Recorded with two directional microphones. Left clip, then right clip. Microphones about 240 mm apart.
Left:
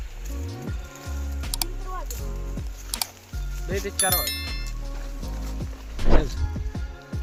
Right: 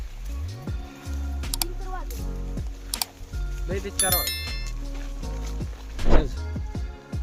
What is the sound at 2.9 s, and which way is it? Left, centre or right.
Music, centre.